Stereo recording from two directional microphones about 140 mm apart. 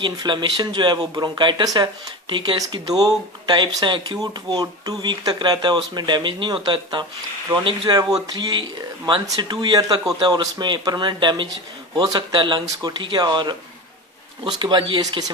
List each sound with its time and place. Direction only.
0.0 s speech: 30° right (ahead or behind)